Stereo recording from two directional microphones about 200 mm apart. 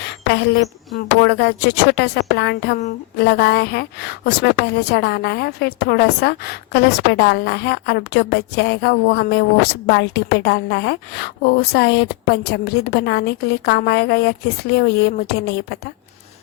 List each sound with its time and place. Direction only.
0.3 s a woman's voice: 60° left (ahead or behind)